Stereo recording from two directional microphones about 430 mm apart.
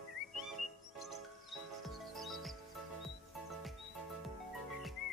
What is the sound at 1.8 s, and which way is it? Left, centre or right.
Music, centre.